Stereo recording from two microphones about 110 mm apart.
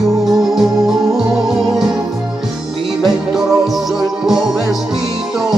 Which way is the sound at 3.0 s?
Centre (ahead or behind).